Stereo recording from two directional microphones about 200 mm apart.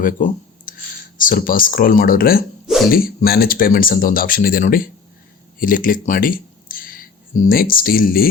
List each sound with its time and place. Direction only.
0.0 s a sound: 45° left (ahead or behind)
1.2 s speech: 45° left (ahead or behind)
2.6 s hiccup: centre (ahead or behind)
2.9 s speech: 45° left (ahead or behind)